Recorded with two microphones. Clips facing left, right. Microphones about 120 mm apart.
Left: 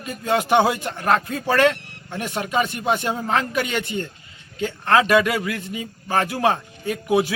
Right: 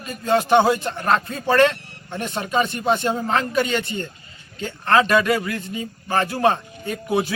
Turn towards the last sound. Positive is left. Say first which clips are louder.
# left 2 dB
turn(degrees=10)  # may be behind; listen again after turning